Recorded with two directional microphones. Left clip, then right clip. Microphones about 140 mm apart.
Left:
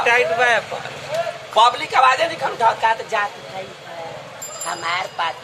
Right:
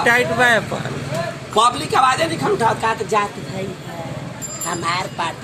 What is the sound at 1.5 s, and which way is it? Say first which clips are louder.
Speech: left 1 dB; 15° left (ahead or behind).